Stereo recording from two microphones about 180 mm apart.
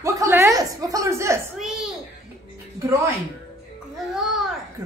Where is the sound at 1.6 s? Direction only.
Centre (ahead or behind).